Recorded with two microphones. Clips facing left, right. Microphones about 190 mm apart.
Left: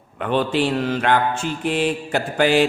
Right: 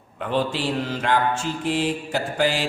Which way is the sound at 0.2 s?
65° left (ahead or behind).